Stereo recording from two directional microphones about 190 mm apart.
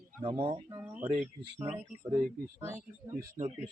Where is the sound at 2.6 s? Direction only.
15° right (ahead or behind).